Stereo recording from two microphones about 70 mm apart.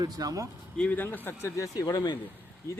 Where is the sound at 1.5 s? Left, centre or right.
Left.